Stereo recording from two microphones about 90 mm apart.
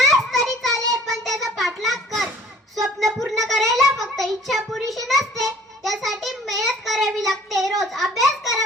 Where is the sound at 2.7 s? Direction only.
Centre (ahead or behind).